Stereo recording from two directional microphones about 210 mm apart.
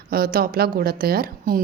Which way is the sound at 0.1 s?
45° right (ahead or behind).